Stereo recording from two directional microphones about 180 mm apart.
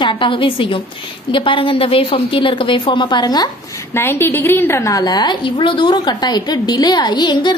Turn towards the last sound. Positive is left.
turn(degrees=25)  # may be behind; listen again after turning